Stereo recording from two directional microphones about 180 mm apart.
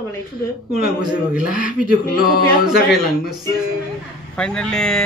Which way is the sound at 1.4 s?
50° left (ahead or behind).